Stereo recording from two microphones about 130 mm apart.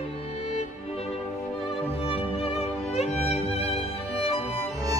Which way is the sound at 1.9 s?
45° left (ahead or behind).